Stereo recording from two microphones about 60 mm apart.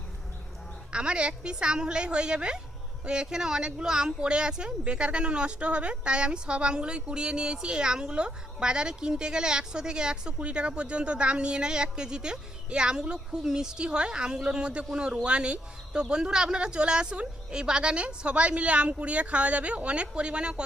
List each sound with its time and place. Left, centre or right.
0.9 s speech: centre